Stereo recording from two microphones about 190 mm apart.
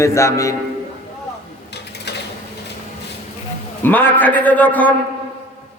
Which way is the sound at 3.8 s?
10° left (ahead or behind).